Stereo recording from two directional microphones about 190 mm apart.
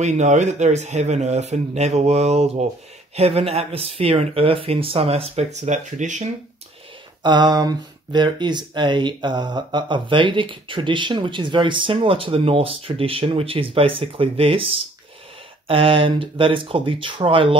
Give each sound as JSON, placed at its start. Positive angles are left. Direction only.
{"t": 0.0, "sound": "speech", "side_deg": -40}
{"t": 7.2, "sound": "speech", "side_deg": -25}